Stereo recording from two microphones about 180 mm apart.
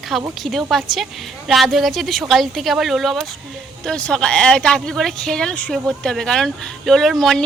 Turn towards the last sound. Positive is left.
turn(degrees=0)  # may be behind; listen again after turning